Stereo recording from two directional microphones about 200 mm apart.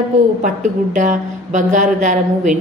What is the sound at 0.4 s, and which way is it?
A woman's voice, 40° right (ahead or behind).